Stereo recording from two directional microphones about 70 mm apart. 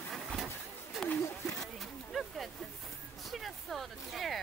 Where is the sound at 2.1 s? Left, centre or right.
Centre.